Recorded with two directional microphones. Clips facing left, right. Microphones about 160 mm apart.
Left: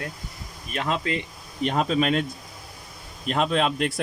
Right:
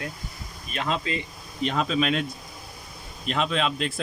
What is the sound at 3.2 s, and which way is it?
Speech, 45° left (ahead or behind).